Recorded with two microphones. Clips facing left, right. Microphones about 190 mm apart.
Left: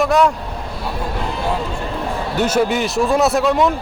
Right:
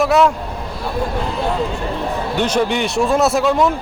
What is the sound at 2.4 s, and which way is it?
A man's voice, 5° left (ahead or behind).